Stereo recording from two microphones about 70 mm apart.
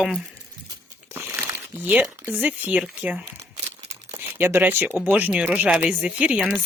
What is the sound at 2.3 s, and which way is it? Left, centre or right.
Speech, right.